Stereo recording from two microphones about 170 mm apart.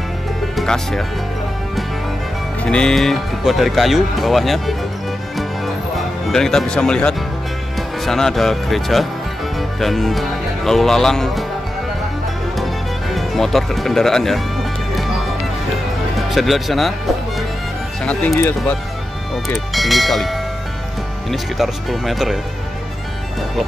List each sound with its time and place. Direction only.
0.6 s speech: centre (ahead or behind)
2.6 s speech: 5° left (ahead or behind)
5.9 s speech: centre (ahead or behind)
13.1 s speech: centre (ahead or behind)
16.2 s speech: centre (ahead or behind)
18.3 s speech: 15° left (ahead or behind)
19.5 s speech: centre (ahead or behind)